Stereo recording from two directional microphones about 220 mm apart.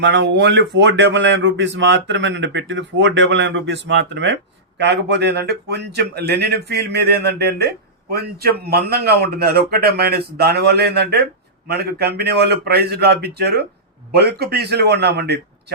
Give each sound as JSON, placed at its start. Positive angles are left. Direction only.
{"t": 0.0, "sound": "speech", "side_deg": -55}